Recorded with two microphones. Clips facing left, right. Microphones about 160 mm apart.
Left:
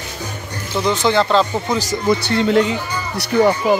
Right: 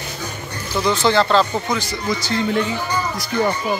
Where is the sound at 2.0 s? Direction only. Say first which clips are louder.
Left 5 dB; 65° left (ahead or behind).